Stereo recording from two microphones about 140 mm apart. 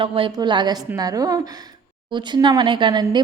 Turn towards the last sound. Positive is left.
turn(degrees=-30)  # may be behind; listen again after turning